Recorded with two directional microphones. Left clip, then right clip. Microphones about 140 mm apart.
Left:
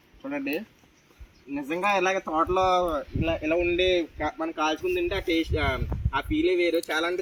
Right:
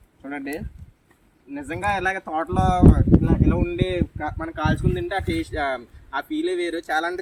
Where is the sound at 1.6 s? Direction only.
20° right (ahead or behind).